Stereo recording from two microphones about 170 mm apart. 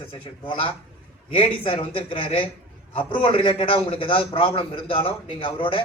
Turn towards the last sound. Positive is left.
turn(degrees=30)  # may be behind; listen again after turning